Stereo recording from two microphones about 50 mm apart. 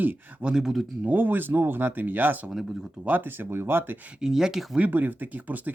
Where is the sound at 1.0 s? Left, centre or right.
Right.